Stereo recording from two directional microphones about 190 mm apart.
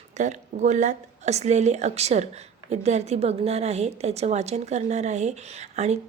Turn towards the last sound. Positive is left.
turn(degrees=-35)  # may be behind; listen again after turning